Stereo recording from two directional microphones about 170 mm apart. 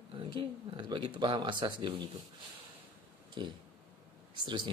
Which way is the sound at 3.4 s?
30° right (ahead or behind).